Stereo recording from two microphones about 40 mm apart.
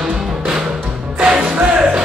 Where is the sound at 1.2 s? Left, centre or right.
Right.